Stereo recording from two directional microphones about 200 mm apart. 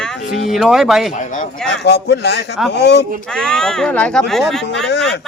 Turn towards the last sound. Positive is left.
turn(degrees=65)  # may be behind; listen again after turning